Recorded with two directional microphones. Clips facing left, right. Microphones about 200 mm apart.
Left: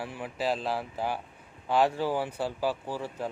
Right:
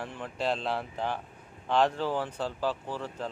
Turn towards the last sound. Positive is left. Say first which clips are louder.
# left 2 dB
turn(degrees=10)  # may be behind; listen again after turning